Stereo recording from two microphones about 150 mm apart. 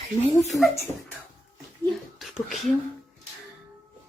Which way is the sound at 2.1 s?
Centre (ahead or behind).